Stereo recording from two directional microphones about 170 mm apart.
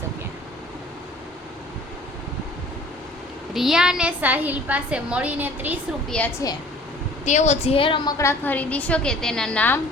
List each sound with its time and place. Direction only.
3.5 s a woman's voice: centre (ahead or behind)
6.1 s a woman's voice: 5° left (ahead or behind)
7.3 s a woman's voice: 45° left (ahead or behind)
8.2 s a woman's voice: 15° left (ahead or behind)